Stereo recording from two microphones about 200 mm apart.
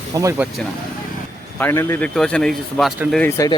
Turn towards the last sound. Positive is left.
turn(degrees=15)  # may be behind; listen again after turning